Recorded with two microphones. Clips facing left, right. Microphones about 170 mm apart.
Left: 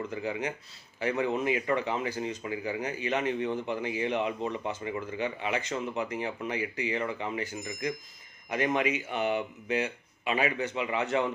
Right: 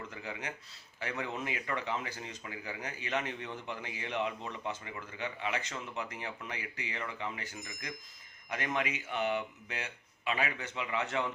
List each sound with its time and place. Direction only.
0.3 s speech: 15° left (ahead or behind)